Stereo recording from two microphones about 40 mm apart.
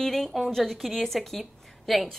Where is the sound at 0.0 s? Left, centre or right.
Centre.